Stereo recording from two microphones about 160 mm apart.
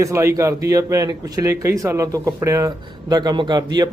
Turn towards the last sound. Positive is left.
turn(degrees=-25)  # may be behind; listen again after turning